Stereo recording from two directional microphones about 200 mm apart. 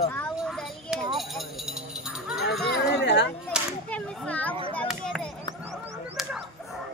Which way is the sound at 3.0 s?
60° left (ahead or behind).